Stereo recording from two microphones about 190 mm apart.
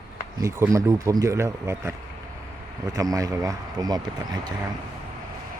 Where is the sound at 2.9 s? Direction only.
20° right (ahead or behind).